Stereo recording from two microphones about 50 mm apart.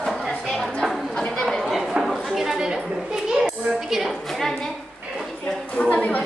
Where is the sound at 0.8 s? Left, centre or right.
Centre.